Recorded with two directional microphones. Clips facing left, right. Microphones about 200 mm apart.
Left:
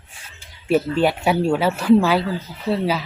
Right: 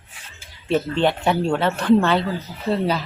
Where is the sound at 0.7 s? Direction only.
10° left (ahead or behind).